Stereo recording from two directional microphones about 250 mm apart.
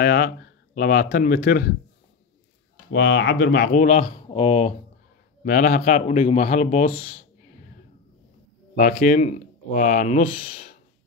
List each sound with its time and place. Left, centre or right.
0.0 s speech: left
2.9 s speech: left
5.4 s speech: left
8.7 s speech: left